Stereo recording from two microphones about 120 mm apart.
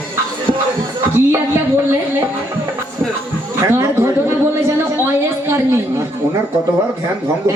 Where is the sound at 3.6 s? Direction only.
25° right (ahead or behind).